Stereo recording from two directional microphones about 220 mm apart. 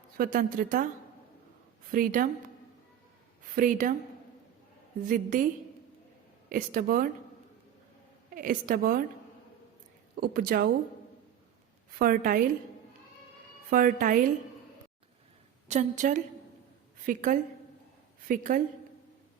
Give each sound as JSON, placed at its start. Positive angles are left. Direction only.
{"t": 0.2, "sound": "a woman's voice", "side_deg": -40}
{"t": 1.9, "sound": "a woman's voice", "side_deg": -40}
{"t": 3.5, "sound": "a woman's voice", "side_deg": -35}
{"t": 5.0, "sound": "a woman's voice", "side_deg": -40}
{"t": 6.5, "sound": "a woman's voice", "side_deg": -40}
{"t": 8.4, "sound": "a woman's voice", "side_deg": -40}
{"t": 10.2, "sound": "a woman's voice", "side_deg": -40}
{"t": 11.9, "sound": "a woman's voice", "side_deg": -40}
{"t": 13.7, "sound": "a woman's voice", "side_deg": -40}
{"t": 15.6, "sound": "a woman's voice", "side_deg": -30}